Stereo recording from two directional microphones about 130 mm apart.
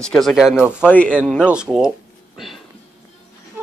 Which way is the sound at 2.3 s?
Centre (ahead or behind).